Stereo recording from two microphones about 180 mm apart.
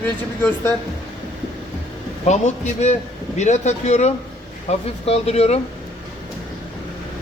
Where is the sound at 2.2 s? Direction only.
40° left (ahead or behind).